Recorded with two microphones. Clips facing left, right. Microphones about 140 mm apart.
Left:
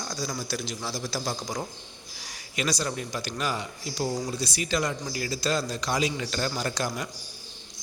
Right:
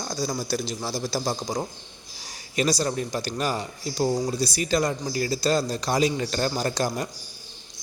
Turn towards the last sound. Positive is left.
turn(degrees=-35)  # may be behind; listen again after turning